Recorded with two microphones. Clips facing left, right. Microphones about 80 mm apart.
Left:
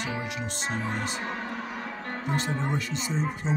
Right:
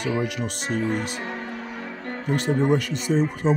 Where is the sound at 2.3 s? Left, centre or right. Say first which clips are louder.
Right 9 dB; right.